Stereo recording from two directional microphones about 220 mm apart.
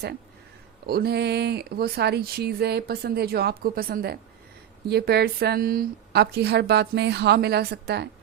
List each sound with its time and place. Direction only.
0.9 s speech: 45° right (ahead or behind)